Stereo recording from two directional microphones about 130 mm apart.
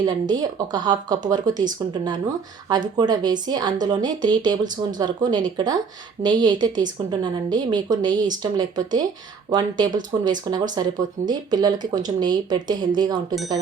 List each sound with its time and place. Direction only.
0.0 s speech: 30° right (ahead or behind)